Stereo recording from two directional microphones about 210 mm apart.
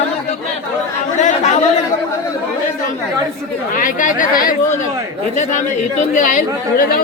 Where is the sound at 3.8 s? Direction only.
40° left (ahead or behind).